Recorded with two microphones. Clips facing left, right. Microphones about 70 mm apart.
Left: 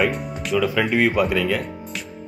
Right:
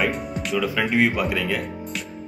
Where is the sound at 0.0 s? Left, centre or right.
Centre.